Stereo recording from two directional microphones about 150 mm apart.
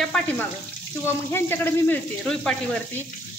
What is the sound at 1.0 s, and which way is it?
Speech, 15° left (ahead or behind).